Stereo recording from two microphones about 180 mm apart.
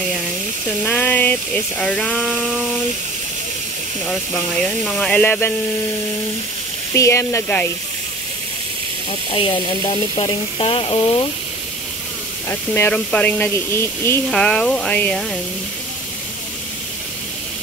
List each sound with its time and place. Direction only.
0.8 s speech: 10° left (ahead or behind)
4.8 s speech: 5° left (ahead or behind)
6.9 s speech: 15° left (ahead or behind)
9.3 s speech: 30° left (ahead or behind)
12.4 s speech: 10° left (ahead or behind)